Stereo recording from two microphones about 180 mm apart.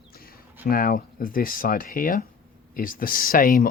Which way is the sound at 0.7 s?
50° left (ahead or behind).